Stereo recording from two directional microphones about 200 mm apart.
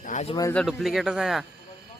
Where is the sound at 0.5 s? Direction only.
Centre (ahead or behind).